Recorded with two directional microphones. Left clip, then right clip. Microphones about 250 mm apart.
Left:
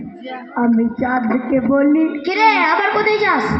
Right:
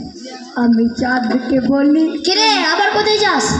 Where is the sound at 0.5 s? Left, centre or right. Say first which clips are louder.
Right 2 dB; right.